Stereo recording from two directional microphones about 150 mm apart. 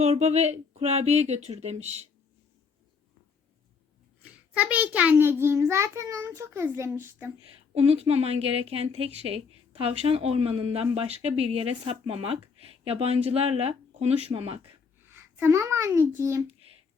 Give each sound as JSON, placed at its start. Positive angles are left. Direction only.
{"t": 0.0, "sound": "speech", "side_deg": -45}
{"t": 4.2, "sound": "a child's voice", "side_deg": -10}
{"t": 7.7, "sound": "a woman's voice", "side_deg": -45}
{"t": 15.0, "sound": "a child's voice", "side_deg": -15}